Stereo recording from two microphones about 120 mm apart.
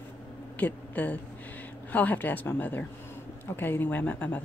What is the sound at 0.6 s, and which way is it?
Speech, 15° left (ahead or behind).